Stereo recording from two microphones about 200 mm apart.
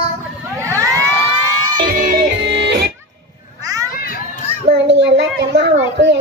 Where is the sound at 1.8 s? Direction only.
45° right (ahead or behind).